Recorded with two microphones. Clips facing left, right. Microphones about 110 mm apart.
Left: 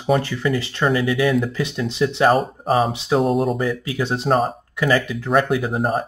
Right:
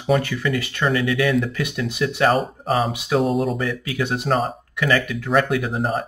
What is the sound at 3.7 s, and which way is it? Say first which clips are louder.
Speech: left 1 dB; 30° left (ahead or behind).